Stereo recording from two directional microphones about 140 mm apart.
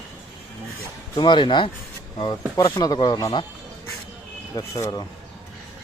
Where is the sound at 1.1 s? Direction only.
35° left (ahead or behind).